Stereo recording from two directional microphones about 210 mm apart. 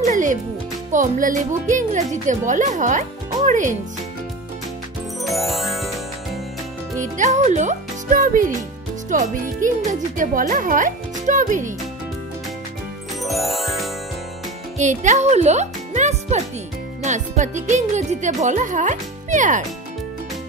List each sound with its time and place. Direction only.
0.0 s music: 35° right (ahead or behind)
0.9 s speech: 40° right (ahead or behind)
3.4 s music: 35° right (ahead or behind)
5.2 s music: centre (ahead or behind)
7.0 s speech: 35° right (ahead or behind)
13.2 s music: centre (ahead or behind)
14.8 s a child's voice: 35° right (ahead or behind)